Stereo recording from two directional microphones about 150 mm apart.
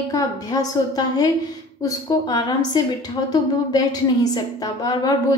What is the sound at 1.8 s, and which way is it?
A woman's voice, 25° left (ahead or behind).